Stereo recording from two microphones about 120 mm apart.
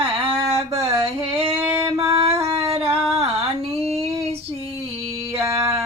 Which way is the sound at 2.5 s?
55° right (ahead or behind).